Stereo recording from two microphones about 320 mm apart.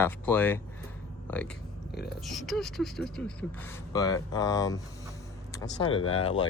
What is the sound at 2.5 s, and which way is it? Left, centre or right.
Speech, centre.